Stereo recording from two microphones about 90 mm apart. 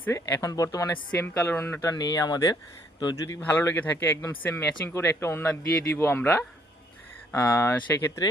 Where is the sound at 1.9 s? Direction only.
45° left (ahead or behind).